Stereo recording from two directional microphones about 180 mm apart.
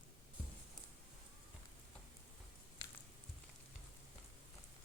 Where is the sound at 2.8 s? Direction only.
25° left (ahead or behind).